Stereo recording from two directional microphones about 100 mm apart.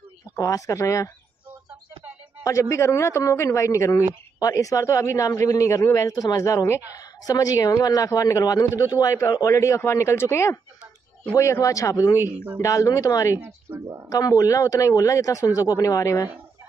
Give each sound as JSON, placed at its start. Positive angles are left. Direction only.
{"t": 0.4, "sound": "a woman's voice", "side_deg": 35}
{"t": 2.4, "sound": "a woman's voice", "side_deg": 30}
{"t": 13.7, "sound": "speech", "side_deg": -20}
{"t": 14.0, "sound": "a woman's voice", "side_deg": 40}